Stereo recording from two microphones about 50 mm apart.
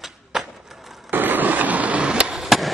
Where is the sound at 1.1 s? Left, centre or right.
Right.